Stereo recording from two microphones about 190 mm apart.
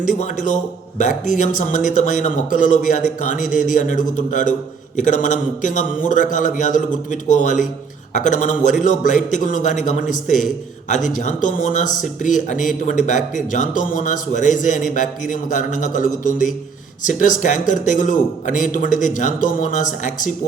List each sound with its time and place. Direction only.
0.2 s speech: 40° left (ahead or behind)